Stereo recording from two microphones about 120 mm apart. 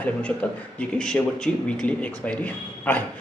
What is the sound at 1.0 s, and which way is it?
Speech, 5° left (ahead or behind).